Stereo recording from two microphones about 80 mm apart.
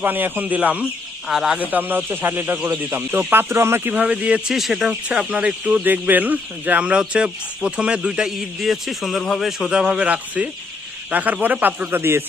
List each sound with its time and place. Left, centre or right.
0.0 s speech: right
1.3 s speech: centre
1.7 s speech: right
4.5 s speech: centre; by 12.2 s right